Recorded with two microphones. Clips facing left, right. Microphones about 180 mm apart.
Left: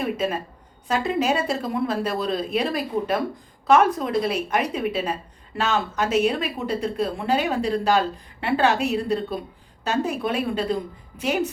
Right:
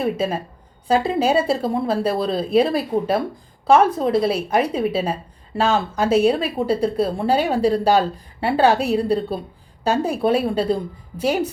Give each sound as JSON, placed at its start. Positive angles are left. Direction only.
{"t": 0.0, "sound": "a woman's voice", "side_deg": -30}